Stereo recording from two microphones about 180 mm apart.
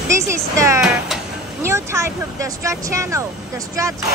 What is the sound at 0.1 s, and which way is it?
Speech, 15° right (ahead or behind).